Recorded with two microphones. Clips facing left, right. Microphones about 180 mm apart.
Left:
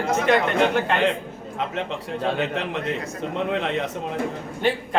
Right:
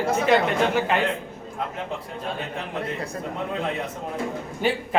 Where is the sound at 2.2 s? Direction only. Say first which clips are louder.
Left 10 dB; 80° left.